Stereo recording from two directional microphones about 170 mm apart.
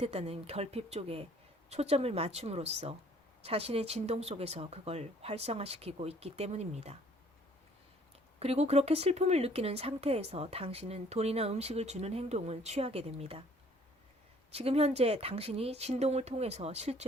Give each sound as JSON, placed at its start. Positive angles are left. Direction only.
{"t": 0.0, "sound": "speech", "side_deg": -35}
{"t": 8.4, "sound": "speech", "side_deg": -35}
{"t": 14.5, "sound": "speech", "side_deg": -35}